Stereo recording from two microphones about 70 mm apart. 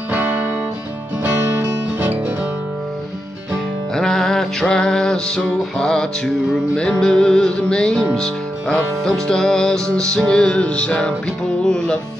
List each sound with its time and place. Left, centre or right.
1.2 s music: right
3.9 s music: centre